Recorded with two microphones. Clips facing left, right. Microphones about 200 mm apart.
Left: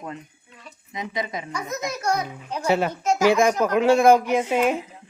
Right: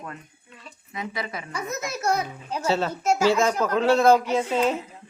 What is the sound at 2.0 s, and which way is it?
Speech, 5° right (ahead or behind).